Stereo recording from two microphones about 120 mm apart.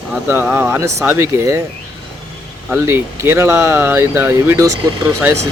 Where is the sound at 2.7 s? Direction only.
20° right (ahead or behind).